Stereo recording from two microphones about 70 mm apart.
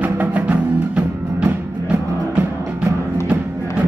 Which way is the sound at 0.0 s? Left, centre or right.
Right.